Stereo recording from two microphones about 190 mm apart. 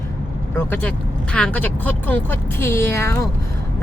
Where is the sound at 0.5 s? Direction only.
10° left (ahead or behind).